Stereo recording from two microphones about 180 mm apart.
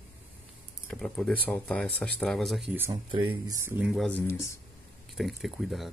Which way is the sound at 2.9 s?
25° right (ahead or behind).